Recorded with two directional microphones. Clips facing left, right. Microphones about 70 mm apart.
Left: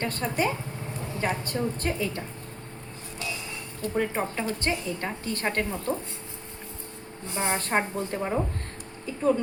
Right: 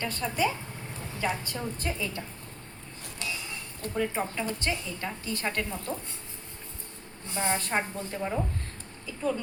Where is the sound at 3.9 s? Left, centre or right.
Left.